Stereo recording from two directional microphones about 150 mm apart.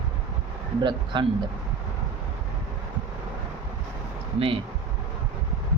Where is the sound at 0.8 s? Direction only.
30° right (ahead or behind).